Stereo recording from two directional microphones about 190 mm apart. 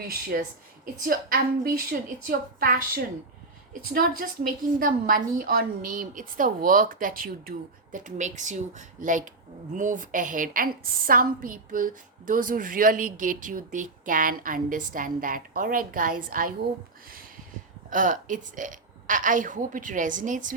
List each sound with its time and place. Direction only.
0.3 s a woman's voice: 50° right (ahead or behind)
17.9 s a woman's voice: 45° right (ahead or behind)